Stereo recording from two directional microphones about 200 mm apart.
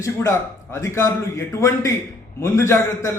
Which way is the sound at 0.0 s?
15° left (ahead or behind).